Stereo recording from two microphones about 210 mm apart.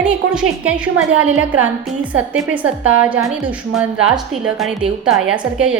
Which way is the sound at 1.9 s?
5° right (ahead or behind).